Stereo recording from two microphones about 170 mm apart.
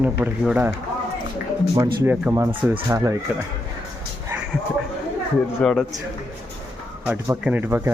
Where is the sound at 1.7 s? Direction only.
15° right (ahead or behind).